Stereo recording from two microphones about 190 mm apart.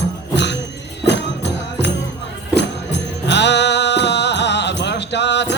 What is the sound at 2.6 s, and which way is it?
Music, 65° left (ahead or behind).